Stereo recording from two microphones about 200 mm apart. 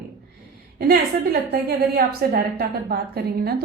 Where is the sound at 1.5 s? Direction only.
50° right (ahead or behind).